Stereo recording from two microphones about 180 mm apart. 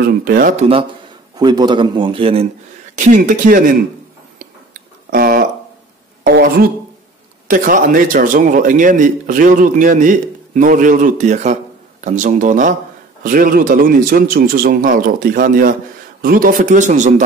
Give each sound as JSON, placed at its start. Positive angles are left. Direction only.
{"t": 0.0, "sound": "speech", "side_deg": -55}
{"t": 1.3, "sound": "a man's voice", "side_deg": -25}
{"t": 3.0, "sound": "a man's voice", "side_deg": -45}
{"t": 5.1, "sound": "a sound", "side_deg": -55}
{"t": 7.4, "sound": "a man's voice", "side_deg": -50}